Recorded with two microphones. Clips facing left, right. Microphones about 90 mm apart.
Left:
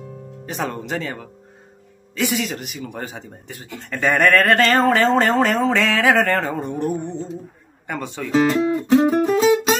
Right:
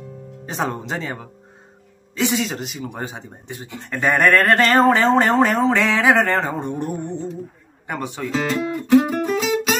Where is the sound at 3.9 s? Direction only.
15° right (ahead or behind).